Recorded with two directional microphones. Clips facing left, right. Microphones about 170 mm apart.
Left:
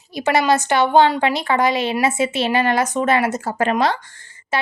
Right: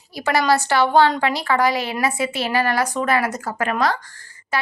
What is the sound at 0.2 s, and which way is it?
Speech, 20° left (ahead or behind).